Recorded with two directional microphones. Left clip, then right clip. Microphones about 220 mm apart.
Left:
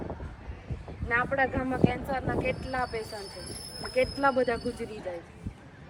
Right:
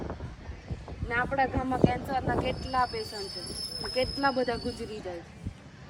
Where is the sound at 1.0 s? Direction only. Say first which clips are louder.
Left 1 dB; 5° right (ahead or behind).